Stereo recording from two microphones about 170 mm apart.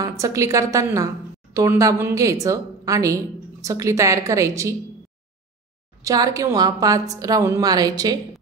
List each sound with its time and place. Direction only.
0.2 s a woman's voice: 20° right (ahead or behind)
6.0 s a woman's voice: 20° right (ahead or behind)